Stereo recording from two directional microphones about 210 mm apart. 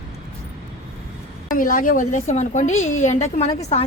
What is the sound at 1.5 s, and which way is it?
A woman's voice, 40° left (ahead or behind).